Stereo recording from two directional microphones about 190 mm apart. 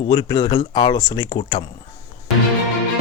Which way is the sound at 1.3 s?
30° left (ahead or behind).